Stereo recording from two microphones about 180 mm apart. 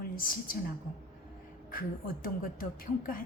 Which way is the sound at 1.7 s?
50° left (ahead or behind).